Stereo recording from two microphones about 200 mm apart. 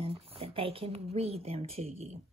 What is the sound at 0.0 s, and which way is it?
Speech, 30° right (ahead or behind).